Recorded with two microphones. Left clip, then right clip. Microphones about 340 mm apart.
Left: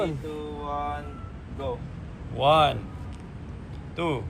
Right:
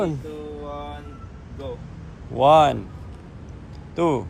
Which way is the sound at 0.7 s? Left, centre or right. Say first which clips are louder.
Left 8 dB; centre.